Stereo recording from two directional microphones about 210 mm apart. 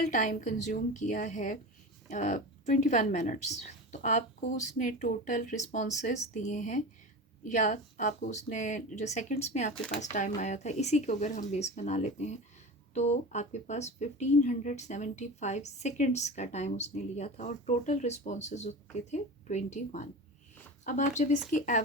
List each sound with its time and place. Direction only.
0.0 s speech: 35° left (ahead or behind)